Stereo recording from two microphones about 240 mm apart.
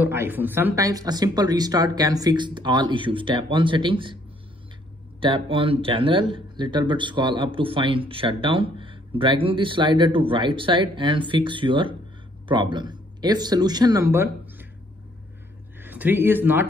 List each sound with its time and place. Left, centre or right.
0.0 s speech: centre
5.2 s speech: right
15.8 s speech: centre